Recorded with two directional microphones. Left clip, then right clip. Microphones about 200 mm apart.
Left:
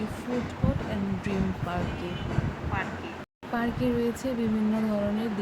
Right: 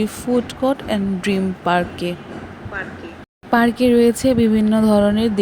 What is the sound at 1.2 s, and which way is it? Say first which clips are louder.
Speech: right 10 dB; 40° right (ahead or behind).